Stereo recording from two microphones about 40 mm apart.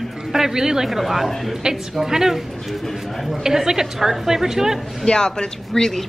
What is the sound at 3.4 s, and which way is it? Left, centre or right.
A woman's voice, centre.